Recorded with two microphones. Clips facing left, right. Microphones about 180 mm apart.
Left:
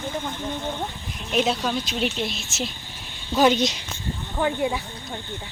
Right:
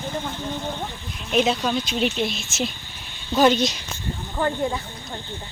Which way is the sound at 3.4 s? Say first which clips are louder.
Right 1 dB; 15° left (ahead or behind).